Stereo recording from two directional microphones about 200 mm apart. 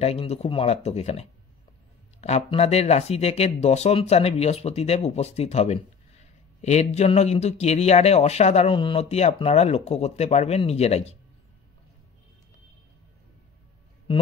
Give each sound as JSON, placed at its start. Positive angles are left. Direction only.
{"t": 0.0, "sound": "speech", "side_deg": 30}